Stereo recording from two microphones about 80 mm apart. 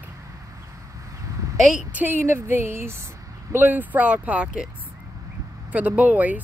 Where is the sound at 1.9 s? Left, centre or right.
Right.